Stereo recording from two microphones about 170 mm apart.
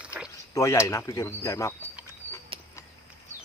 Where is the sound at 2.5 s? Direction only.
30° right (ahead or behind).